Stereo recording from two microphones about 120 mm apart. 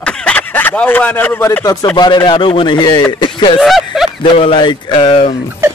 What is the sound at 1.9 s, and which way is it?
Speech, 35° left (ahead or behind).